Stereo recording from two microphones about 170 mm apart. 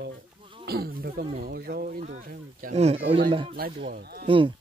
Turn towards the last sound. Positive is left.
turn(degrees=-30)  # may be behind; listen again after turning